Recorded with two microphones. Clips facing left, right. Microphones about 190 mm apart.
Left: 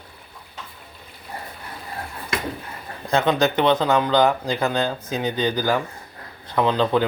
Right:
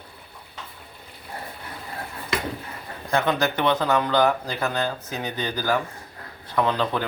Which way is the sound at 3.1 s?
20° left (ahead or behind).